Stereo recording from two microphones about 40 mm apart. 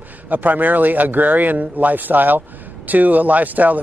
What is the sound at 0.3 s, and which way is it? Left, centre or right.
A man's voice, right.